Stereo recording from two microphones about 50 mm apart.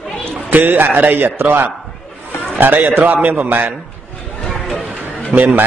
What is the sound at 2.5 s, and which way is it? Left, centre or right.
A man's voice, right.